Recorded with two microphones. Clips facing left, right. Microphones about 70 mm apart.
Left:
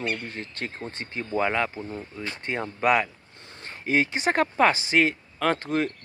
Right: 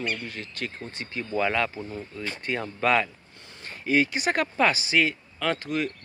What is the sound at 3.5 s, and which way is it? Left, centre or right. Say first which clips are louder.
Speech: right 1 dB; left.